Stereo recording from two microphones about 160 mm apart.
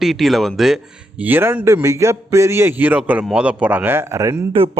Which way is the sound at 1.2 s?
10° right (ahead or behind).